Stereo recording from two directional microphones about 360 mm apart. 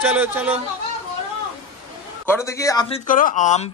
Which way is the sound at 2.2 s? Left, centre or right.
Centre.